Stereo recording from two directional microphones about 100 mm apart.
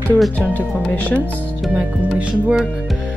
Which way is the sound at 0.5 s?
15° left (ahead or behind).